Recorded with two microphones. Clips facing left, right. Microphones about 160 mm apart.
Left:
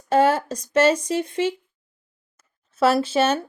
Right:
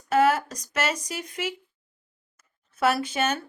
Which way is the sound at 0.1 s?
30° left (ahead or behind).